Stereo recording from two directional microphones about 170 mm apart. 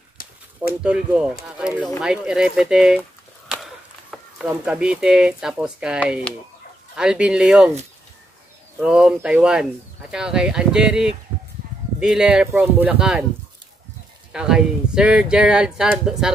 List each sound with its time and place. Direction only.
0.2 s a sound: 55° left (ahead or behind)
0.8 s speech: 5° right (ahead or behind)
8.7 s speech: 5° right (ahead or behind)
14.3 s speech: 5° right (ahead or behind)